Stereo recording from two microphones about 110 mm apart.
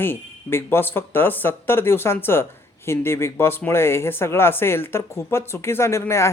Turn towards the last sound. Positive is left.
turn(degrees=25)  # may be behind; listen again after turning